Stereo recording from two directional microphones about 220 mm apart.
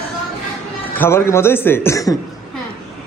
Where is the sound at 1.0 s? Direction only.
10° left (ahead or behind).